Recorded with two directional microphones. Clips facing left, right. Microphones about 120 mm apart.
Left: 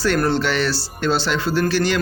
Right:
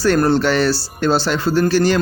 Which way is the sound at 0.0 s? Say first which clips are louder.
Right 4 dB; 40° right (ahead or behind).